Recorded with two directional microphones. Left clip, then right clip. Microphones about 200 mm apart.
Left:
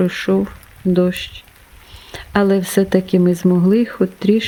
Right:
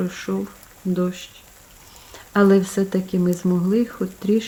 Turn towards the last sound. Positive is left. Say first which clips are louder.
# left 6 dB
turn(degrees=40)  # may be behind; listen again after turning